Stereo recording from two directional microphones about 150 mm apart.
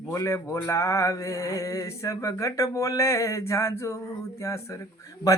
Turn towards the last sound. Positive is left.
turn(degrees=20)  # may be behind; listen again after turning